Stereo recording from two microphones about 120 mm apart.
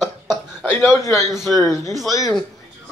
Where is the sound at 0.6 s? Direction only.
25° left (ahead or behind).